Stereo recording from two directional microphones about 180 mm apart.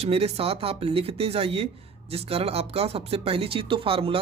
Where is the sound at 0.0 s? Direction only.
35° right (ahead or behind).